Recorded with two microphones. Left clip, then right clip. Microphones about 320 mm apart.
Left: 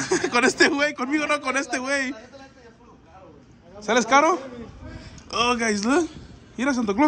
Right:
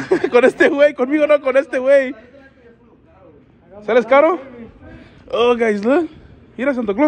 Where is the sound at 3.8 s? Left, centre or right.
Centre.